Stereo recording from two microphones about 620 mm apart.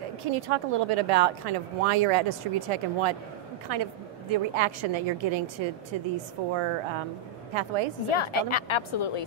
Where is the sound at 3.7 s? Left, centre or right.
Right.